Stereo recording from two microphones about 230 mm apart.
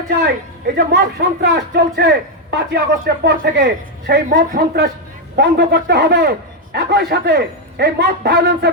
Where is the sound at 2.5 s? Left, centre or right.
Right.